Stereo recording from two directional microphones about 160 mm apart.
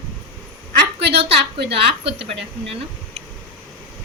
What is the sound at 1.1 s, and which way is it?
Speech, 35° right (ahead or behind).